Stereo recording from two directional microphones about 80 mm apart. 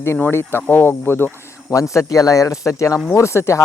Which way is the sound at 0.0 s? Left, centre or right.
Left.